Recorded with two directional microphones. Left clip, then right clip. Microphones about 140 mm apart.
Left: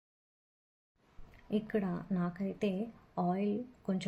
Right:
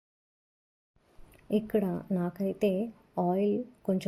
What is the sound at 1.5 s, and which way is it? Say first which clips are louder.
Speech: right 6 dB; 40° right (ahead or behind).